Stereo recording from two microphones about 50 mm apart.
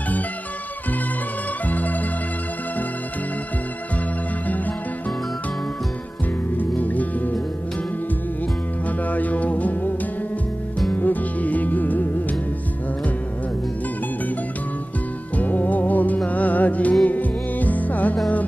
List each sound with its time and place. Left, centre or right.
1.7 s music: left
6.5 s music: left
8.8 s music: left
15.3 s music: left